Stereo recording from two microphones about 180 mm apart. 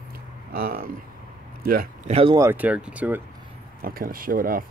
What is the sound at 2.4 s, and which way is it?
Speech, 10° right (ahead or behind).